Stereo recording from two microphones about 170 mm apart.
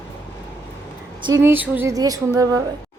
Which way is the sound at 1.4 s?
10° right (ahead or behind).